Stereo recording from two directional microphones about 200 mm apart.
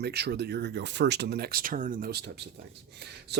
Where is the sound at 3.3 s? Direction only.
60° right (ahead or behind).